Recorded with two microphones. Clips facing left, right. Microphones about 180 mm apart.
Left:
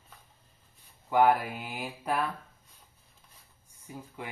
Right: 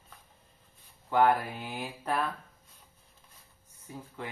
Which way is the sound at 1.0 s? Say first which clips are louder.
Left 1 dB; 10° left (ahead or behind).